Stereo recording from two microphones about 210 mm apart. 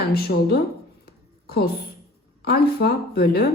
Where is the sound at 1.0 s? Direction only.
50° left (ahead or behind).